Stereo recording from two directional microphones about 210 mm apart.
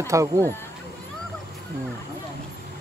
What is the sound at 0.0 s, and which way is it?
Speech, 15° right (ahead or behind).